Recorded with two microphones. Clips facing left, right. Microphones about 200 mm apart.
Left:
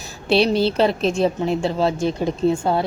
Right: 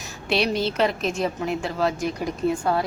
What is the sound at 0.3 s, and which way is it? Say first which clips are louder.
A woman's voice: left 6 dB; 30° left (ahead or behind).